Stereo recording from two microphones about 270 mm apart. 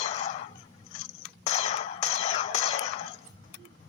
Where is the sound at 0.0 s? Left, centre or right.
Left.